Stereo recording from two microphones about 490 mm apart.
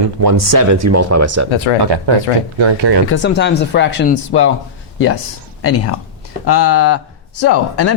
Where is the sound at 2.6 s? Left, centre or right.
Right.